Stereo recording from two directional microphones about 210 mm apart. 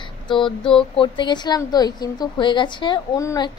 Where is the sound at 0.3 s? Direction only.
25° left (ahead or behind).